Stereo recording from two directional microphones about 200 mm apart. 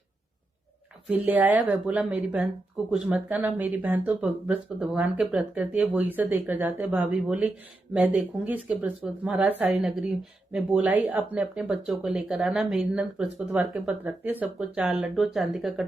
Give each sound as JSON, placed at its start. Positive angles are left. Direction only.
{"t": 1.0, "sound": "speech", "side_deg": -10}